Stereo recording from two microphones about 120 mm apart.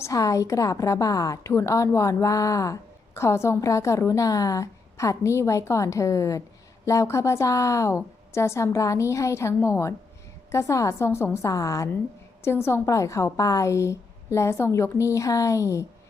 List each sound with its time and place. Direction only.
0.0 s a woman's voice: 25° left (ahead or behind)